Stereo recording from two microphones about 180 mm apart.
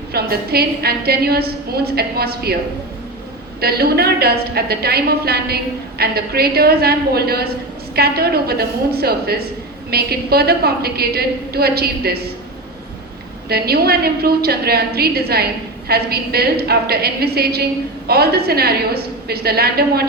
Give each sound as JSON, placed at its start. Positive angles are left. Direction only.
{"t": 0.1, "sound": "a woman's voice", "side_deg": -60}
{"t": 3.6, "sound": "a woman's voice", "side_deg": -60}
{"t": 13.5, "sound": "a woman's voice", "side_deg": -60}